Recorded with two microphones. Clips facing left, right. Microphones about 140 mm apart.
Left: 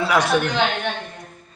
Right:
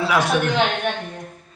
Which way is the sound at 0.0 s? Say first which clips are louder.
Even; centre (ahead or behind).